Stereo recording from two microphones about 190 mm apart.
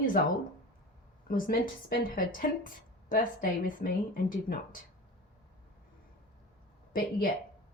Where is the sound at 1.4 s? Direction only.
50° left (ahead or behind).